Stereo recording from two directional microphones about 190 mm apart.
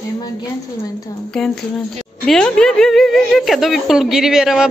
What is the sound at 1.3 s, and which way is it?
Speech, centre (ahead or behind).